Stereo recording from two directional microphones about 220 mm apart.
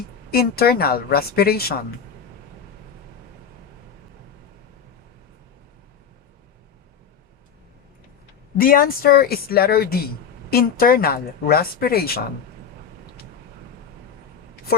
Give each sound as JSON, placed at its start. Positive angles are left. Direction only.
{"t": 0.3, "sound": "a woman's voice", "side_deg": 45}
{"t": 8.5, "sound": "a woman's voice", "side_deg": 40}